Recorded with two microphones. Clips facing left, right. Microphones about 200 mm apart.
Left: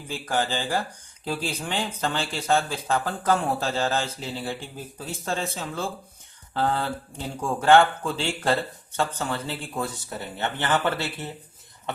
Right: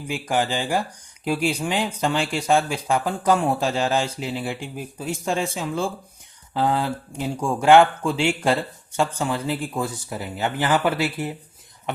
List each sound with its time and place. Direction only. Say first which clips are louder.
0.1 s speech: right 3 dB; 15° right (ahead or behind)
7.1 s speech: right 4 dB; 15° right (ahead or behind)